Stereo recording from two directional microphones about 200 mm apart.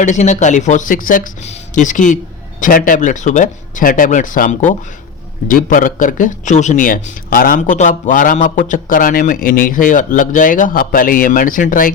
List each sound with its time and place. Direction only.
0.0 s speech: 35° left (ahead or behind)